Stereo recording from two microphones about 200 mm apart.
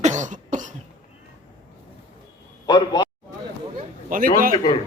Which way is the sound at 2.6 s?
20° left (ahead or behind).